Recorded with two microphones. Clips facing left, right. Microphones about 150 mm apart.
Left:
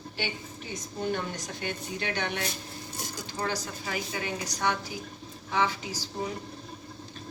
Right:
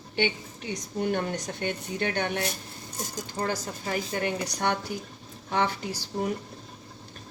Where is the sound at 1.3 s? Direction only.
55° right (ahead or behind).